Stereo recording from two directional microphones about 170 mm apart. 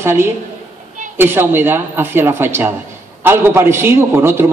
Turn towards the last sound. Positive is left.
turn(degrees=-15)  # may be behind; listen again after turning